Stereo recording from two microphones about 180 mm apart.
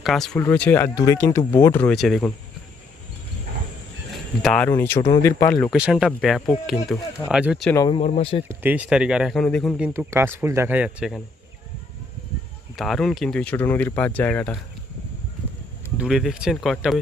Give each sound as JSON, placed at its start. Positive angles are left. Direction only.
{"t": 0.0, "sound": "speech", "side_deg": 0}
{"t": 4.4, "sound": "speech", "side_deg": 5}
{"t": 5.7, "sound": "speech", "side_deg": -5}
{"t": 8.0, "sound": "speech", "side_deg": 35}
{"t": 8.4, "sound": "speech", "side_deg": -10}
{"t": 12.7, "sound": "speech", "side_deg": 0}
{"t": 16.0, "sound": "speech", "side_deg": -5}